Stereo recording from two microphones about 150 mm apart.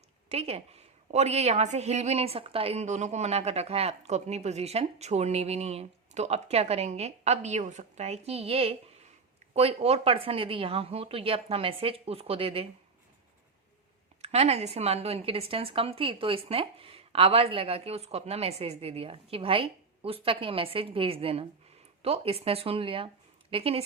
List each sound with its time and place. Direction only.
0.3 s a woman's voice: 45° right (ahead or behind)
14.2 s speech: 45° right (ahead or behind)